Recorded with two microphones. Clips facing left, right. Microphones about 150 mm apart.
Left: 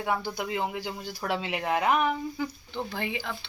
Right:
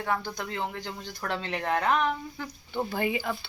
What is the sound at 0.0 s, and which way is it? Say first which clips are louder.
Speech: left 1 dB; 10° left (ahead or behind).